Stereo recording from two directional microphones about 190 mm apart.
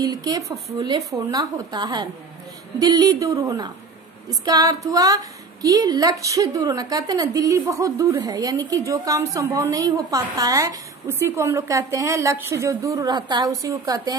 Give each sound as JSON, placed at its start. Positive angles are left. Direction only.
{"t": 0.0, "sound": "a woman's voice", "side_deg": -20}